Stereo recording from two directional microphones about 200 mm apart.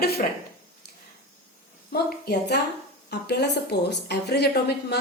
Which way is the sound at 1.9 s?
55° left (ahead or behind).